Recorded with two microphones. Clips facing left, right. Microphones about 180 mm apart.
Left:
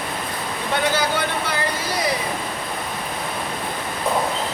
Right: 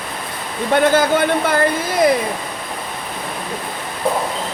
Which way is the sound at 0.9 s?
50° right (ahead or behind).